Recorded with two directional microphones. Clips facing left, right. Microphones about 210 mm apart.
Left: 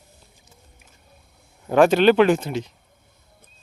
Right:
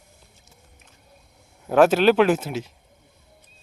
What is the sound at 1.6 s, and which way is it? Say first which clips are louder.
Speech: left 1 dB; 5° right (ahead or behind).